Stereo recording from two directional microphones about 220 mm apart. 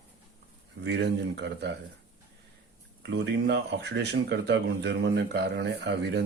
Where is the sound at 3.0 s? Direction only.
50° right (ahead or behind).